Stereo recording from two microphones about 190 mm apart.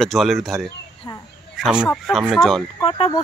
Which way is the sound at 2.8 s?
25° left (ahead or behind).